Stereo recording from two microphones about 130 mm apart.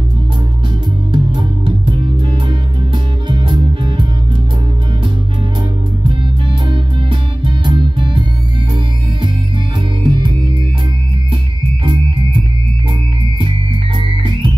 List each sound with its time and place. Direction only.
1.1 s music: 40° right (ahead or behind)
6.7 s music: 40° right (ahead or behind)
10.0 s music: 40° right (ahead or behind)
13.9 s music: 40° right (ahead or behind)